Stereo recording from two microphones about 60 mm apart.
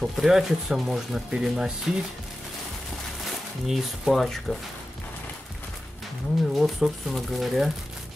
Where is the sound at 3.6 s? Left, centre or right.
Centre.